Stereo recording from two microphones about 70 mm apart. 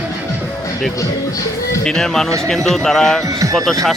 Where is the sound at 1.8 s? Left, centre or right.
Centre.